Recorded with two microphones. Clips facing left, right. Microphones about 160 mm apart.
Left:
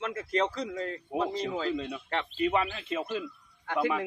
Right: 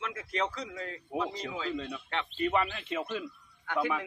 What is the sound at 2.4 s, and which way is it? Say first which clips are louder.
Speech: left 1 dB; 5° left (ahead or behind).